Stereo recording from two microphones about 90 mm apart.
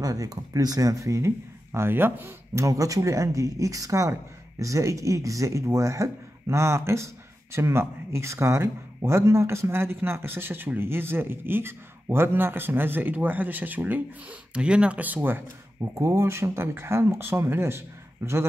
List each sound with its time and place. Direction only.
0.0 s speech: 40° right (ahead or behind)